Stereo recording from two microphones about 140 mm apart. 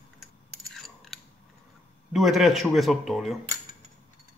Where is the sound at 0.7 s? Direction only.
5° left (ahead or behind).